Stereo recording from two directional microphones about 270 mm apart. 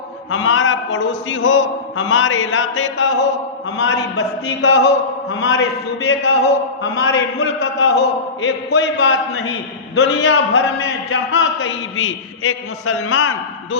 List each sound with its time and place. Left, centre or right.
0.3 s a man's voice: left